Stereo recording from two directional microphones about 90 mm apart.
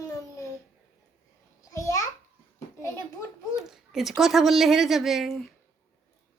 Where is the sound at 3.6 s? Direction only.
5° right (ahead or behind).